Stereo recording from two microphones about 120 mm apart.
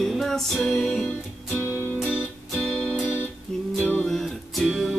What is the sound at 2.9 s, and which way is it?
Music, 5° right (ahead or behind).